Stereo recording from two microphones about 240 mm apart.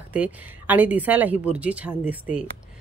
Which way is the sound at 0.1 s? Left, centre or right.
Centre.